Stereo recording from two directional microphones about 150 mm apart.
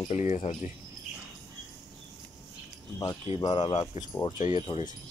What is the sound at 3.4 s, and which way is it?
Speech, 30° left (ahead or behind).